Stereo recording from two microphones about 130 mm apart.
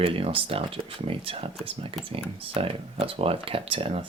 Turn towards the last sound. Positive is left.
turn(degrees=-45)  # may be behind; listen again after turning